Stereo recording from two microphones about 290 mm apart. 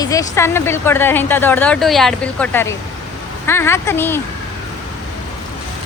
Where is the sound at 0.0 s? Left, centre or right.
Centre.